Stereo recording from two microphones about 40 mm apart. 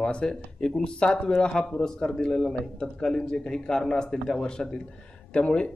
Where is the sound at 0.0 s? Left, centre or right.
Left.